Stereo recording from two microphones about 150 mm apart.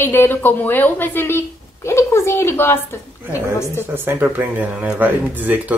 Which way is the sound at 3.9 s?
15° right (ahead or behind).